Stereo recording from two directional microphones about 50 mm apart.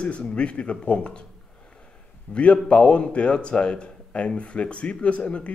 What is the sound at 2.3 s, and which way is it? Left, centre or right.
Speech, left.